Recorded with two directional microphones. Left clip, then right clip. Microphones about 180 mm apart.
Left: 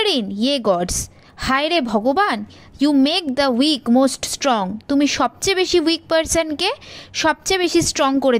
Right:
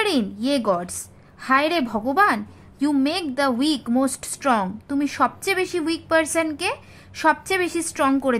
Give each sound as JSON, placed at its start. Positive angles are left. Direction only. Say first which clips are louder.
{"t": 0.0, "sound": "a woman's voice", "louder": "left 4 dB", "side_deg": 30}